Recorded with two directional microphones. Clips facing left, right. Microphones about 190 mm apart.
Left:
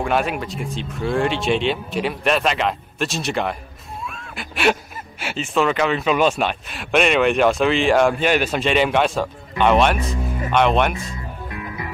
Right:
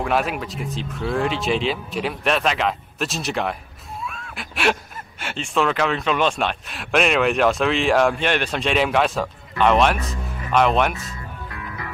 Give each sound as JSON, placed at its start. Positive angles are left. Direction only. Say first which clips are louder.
{"t": 0.0, "sound": "speech", "louder": "left 1 dB", "side_deg": 0}
{"t": 4.0, "sound": "a sound", "louder": "even", "side_deg": 0}
{"t": 5.2, "sound": "speech", "louder": "left 2 dB", "side_deg": 5}
{"t": 11.4, "sound": "music", "louder": "left 4 dB", "side_deg": 20}